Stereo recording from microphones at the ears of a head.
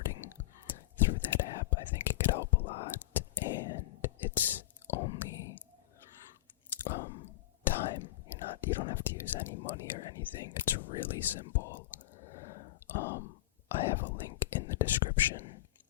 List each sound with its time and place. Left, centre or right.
0.0 s whispering: left